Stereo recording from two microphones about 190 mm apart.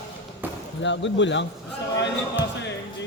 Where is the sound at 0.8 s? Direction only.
70° left (ahead or behind).